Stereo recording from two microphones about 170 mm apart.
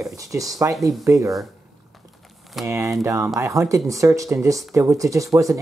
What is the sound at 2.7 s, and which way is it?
Speech, 15° right (ahead or behind).